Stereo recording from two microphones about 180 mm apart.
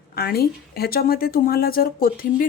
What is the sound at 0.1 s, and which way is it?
A woman's voice, 60° left (ahead or behind).